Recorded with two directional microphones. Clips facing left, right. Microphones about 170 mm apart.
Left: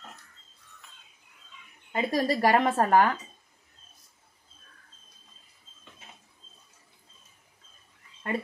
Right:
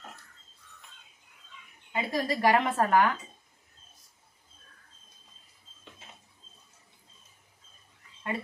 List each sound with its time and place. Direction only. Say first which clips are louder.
1.9 s speech: left 4 dB; 45° left (ahead or behind)